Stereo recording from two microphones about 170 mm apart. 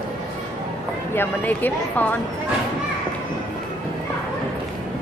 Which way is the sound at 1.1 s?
10° left (ahead or behind).